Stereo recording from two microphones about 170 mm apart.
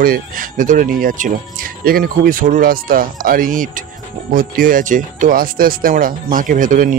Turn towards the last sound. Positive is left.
turn(degrees=-50)  # may be behind; listen again after turning